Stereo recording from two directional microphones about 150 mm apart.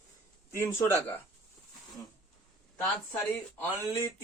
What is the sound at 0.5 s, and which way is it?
Speech, 15° left (ahead or behind).